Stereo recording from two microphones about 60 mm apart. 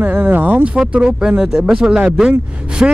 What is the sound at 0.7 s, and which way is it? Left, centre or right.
A man's voice, centre.